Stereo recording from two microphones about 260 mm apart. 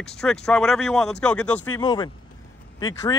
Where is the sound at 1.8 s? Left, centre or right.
Centre.